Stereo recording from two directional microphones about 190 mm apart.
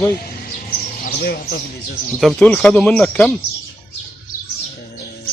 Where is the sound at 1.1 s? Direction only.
50° left (ahead or behind).